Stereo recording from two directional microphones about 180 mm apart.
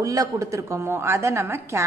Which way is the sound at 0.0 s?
20° right (ahead or behind).